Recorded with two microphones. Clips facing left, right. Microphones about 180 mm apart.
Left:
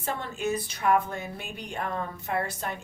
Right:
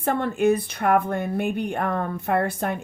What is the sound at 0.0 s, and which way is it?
Speech, 55° right (ahead or behind).